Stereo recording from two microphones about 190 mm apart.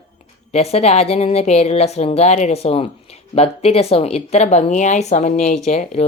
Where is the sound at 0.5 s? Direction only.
30° left (ahead or behind).